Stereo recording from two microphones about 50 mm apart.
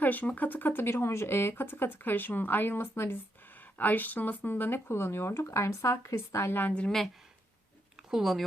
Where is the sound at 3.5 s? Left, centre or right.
Left.